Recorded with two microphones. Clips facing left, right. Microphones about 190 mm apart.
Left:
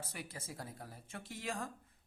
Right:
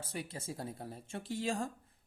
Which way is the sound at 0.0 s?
30° right (ahead or behind).